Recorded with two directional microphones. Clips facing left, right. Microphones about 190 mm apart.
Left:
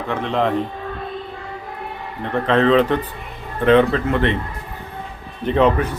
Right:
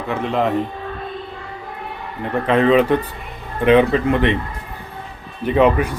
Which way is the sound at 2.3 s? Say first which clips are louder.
Right 1 dB; 10° right (ahead or behind).